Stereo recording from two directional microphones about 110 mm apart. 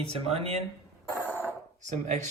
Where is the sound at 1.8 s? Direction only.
90° right.